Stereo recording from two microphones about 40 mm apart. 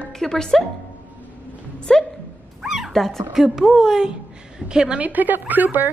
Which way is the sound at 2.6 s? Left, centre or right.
Centre.